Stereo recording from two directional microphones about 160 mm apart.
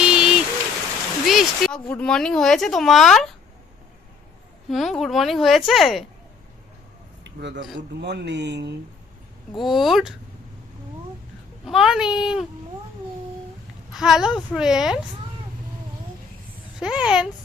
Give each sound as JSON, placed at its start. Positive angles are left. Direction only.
{"t": 0.0, "sound": "rain on surface", "side_deg": -5}
{"t": 1.2, "sound": "speech", "side_deg": 0}
{"t": 4.7, "sound": "a woman's voice", "side_deg": 0}
{"t": 7.3, "sound": "a man's voice", "side_deg": -90}
{"t": 9.6, "sound": "a woman's voice", "side_deg": 0}
{"t": 11.6, "sound": "a woman's voice", "side_deg": 0}
{"t": 13.9, "sound": "a woman's voice", "side_deg": 0}
{"t": 16.8, "sound": "a woman's voice", "side_deg": -5}